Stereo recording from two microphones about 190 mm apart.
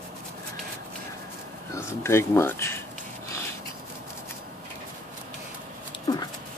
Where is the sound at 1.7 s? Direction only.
15° left (ahead or behind).